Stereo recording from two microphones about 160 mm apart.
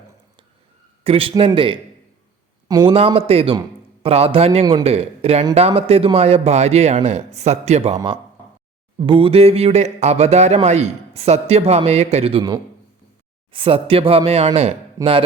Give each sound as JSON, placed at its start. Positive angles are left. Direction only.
{"t": 1.0, "sound": "a man's voice", "side_deg": -35}
{"t": 2.9, "sound": "speech", "side_deg": -35}
{"t": 7.9, "sound": "speech", "side_deg": -30}
{"t": 13.5, "sound": "speech", "side_deg": -35}
{"t": 15.0, "sound": "speech", "side_deg": -20}